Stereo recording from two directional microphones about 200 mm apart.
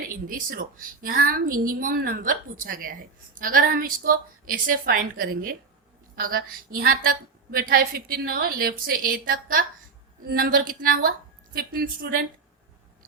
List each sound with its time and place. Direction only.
0.3 s a woman's voice: 45° right (ahead or behind)